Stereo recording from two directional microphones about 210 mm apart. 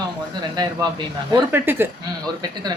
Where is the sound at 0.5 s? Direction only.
20° right (ahead or behind).